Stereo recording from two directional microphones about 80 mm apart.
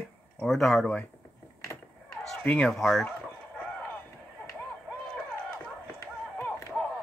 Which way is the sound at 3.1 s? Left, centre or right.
Centre.